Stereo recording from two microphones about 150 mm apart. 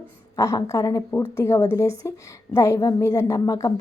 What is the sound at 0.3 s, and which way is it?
A woman's voice, 20° left (ahead or behind).